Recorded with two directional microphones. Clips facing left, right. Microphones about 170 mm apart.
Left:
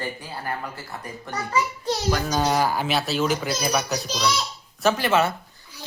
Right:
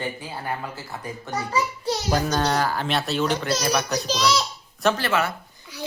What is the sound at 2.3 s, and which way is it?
Speech, 10° left (ahead or behind).